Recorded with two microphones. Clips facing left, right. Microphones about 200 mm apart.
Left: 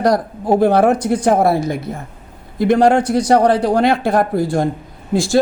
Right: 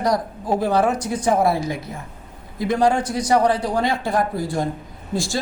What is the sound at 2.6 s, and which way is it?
Speech, 65° left (ahead or behind).